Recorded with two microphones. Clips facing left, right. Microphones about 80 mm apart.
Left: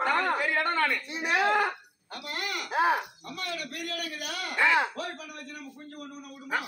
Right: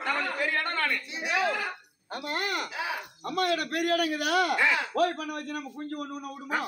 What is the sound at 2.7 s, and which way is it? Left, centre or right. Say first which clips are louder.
Speech: left 9 dB; left.